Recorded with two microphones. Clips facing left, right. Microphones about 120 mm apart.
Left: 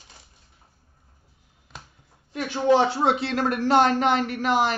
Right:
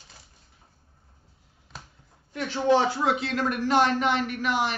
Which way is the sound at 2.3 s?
25° left (ahead or behind).